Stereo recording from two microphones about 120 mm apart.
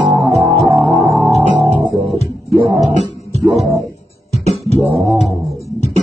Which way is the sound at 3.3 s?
60° right (ahead or behind).